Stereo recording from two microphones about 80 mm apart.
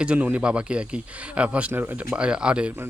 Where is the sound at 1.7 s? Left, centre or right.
Right.